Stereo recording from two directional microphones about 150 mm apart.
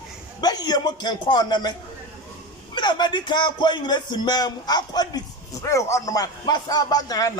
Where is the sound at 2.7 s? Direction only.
30° left (ahead or behind).